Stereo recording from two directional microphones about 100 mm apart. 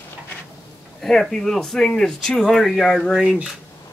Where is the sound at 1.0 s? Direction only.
5° left (ahead or behind).